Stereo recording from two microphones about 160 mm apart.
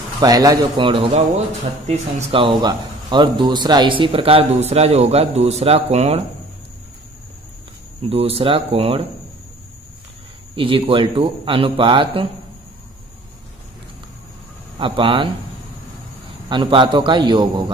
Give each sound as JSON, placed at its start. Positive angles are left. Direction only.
{"t": 0.2, "sound": "a man's voice", "side_deg": -25}
{"t": 1.9, "sound": "speech", "side_deg": -45}
{"t": 2.4, "sound": "speech", "side_deg": -30}
{"t": 8.1, "sound": "speech", "side_deg": -40}
{"t": 10.5, "sound": "speech", "side_deg": -35}
{"t": 14.8, "sound": "speech", "side_deg": -30}
{"t": 16.4, "sound": "a man's voice", "side_deg": -30}